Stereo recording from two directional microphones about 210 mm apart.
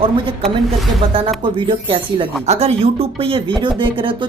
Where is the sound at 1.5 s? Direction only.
25° right (ahead or behind).